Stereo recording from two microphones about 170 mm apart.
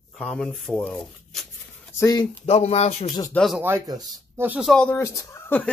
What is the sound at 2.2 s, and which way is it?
Speech, 40° left (ahead or behind).